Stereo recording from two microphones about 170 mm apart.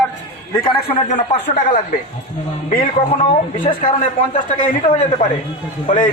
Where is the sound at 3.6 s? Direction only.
30° left (ahead or behind).